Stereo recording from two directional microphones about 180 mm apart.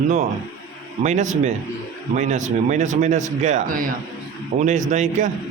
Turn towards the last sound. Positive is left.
turn(degrees=-40)  # may be behind; listen again after turning